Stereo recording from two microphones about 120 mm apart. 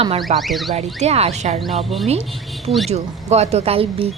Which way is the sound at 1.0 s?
60° right (ahead or behind).